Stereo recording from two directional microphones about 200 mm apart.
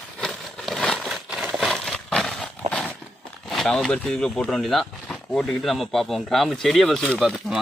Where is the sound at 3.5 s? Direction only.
Centre (ahead or behind).